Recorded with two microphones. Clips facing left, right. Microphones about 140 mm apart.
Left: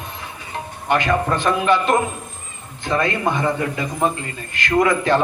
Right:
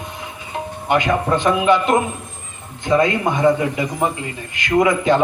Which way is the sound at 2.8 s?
20° right (ahead or behind).